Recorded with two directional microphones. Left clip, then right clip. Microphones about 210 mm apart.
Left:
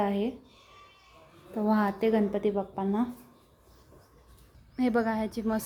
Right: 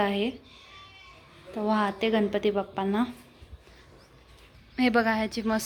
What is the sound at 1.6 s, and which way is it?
A woman's voice, 20° left (ahead or behind).